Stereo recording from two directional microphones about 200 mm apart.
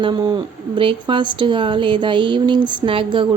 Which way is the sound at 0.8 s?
25° right (ahead or behind).